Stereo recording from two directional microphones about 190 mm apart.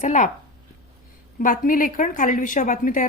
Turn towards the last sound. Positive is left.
turn(degrees=45)  # may be behind; listen again after turning